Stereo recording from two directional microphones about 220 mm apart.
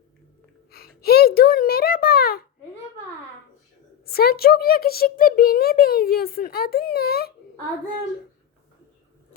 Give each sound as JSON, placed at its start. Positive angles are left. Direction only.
{"t": 0.7, "sound": "a child's voice", "side_deg": 45}
{"t": 4.1, "sound": "a child's voice", "side_deg": 45}